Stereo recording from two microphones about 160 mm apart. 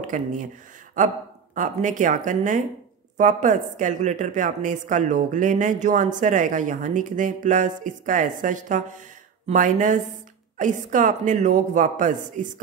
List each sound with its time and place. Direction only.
0.0 s a woman's voice: 55° right (ahead or behind)